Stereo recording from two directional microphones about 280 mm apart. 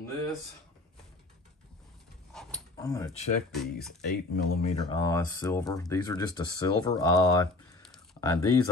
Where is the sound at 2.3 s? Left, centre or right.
Centre.